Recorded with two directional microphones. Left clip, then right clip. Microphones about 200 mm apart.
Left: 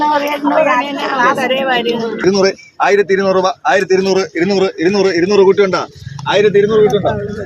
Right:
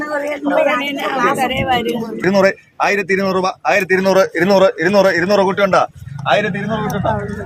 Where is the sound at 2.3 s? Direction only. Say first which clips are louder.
Even; 60° right (ahead or behind).